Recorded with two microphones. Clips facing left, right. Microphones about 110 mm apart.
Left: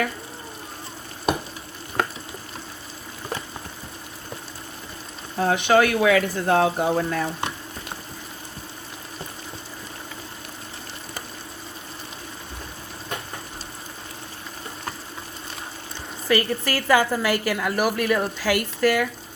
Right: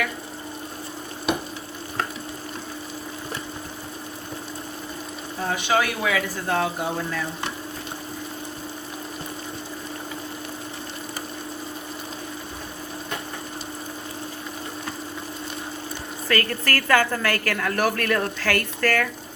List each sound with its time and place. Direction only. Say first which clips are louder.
5.4 s speech: left 5 dB; 55° left (ahead or behind)
16.3 s a woman's voice: left 2 dB; 15° left (ahead or behind)